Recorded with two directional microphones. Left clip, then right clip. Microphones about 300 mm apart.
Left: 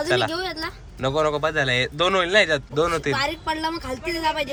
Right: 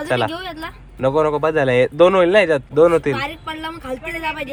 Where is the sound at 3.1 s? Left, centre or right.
Centre.